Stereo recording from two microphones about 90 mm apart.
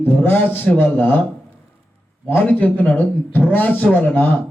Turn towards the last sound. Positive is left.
turn(degrees=20)  # may be behind; listen again after turning